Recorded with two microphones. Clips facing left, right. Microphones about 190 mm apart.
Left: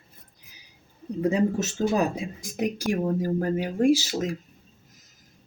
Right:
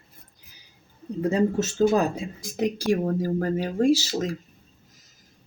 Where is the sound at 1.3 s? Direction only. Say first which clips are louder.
Right 2 dB; 15° left (ahead or behind).